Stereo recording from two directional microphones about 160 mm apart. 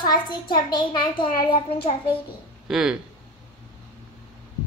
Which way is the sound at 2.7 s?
5° right (ahead or behind).